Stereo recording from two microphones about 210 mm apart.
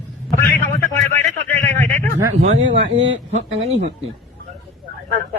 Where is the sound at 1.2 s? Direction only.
10° left (ahead or behind).